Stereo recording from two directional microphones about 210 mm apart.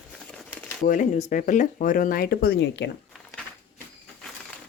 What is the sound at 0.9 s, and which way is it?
A woman's voice, 40° left (ahead or behind).